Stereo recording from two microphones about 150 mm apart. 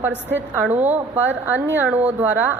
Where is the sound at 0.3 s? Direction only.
10° right (ahead or behind).